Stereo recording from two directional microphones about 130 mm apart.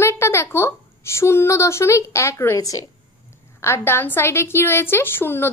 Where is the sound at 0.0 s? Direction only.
20° left (ahead or behind).